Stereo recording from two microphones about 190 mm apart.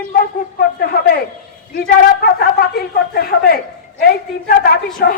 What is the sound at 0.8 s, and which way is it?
Speech, 50° left (ahead or behind).